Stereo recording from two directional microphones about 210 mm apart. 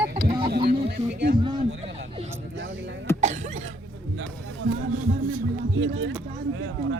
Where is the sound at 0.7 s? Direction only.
50° right (ahead or behind).